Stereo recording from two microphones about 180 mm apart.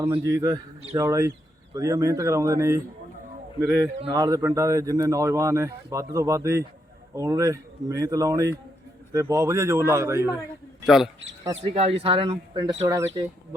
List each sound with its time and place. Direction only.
0.1 s a man's voice: 20° right (ahead or behind)
4.0 s a man's voice: 20° right (ahead or behind)
10.8 s speech: centre (ahead or behind)
11.6 s a man's voice: 30° right (ahead or behind)